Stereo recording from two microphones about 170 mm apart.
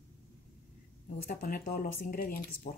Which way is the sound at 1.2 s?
60° left (ahead or behind).